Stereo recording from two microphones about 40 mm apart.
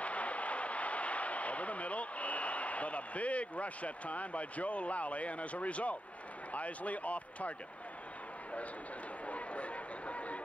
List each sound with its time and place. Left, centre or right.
0.0 s a sound: left
6.5 s speech: left
9.2 s chatter: left